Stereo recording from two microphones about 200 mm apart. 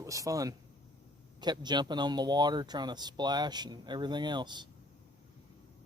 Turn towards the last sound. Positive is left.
turn(degrees=-20)  # may be behind; listen again after turning